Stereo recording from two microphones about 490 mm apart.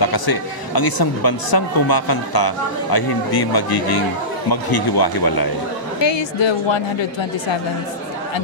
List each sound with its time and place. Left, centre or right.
0.0 s speech: left
5.9 s a woman's voice: left